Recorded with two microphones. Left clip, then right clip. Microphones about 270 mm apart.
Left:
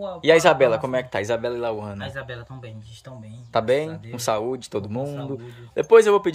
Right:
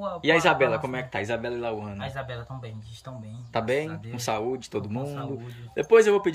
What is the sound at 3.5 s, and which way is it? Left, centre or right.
Speech, centre.